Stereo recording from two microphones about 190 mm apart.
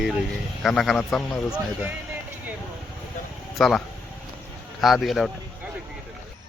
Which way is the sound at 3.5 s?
Centre (ahead or behind).